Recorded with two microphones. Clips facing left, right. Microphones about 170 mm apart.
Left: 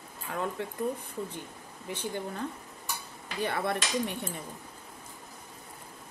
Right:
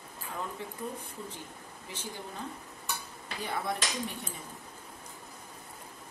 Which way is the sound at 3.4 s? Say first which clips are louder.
Left 4 dB; 65° left (ahead or behind).